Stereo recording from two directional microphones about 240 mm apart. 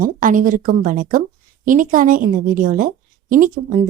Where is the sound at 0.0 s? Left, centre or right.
Right.